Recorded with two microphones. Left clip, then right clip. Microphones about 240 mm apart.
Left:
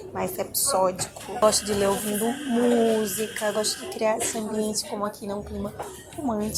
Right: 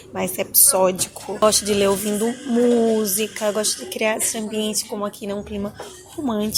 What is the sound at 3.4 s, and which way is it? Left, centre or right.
A woman's voice, right.